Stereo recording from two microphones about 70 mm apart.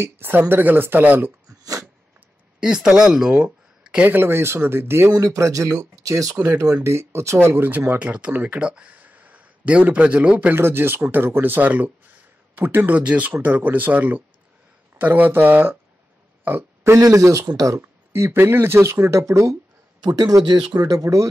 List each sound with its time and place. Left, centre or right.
0.0 s speech: right
1.5 s dog: right
2.6 s speech: centre
4.1 s speech: right
5.1 s speech: right
6.4 s speech: right; by 10.5 s centre
10.5 s speech: right
17.0 s speech: right
20.0 s speech: right